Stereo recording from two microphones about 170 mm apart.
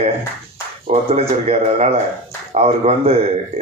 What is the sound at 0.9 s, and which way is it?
Speech, 40° right (ahead or behind).